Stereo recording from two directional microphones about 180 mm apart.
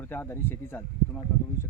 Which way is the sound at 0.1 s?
10° left (ahead or behind).